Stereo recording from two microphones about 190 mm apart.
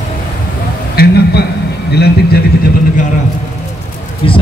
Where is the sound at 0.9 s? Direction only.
55° left (ahead or behind).